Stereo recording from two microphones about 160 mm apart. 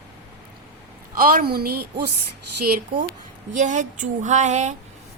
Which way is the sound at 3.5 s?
50° right (ahead or behind).